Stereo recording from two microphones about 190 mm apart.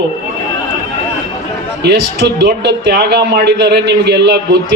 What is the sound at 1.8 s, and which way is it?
A man's voice, 65° right (ahead or behind).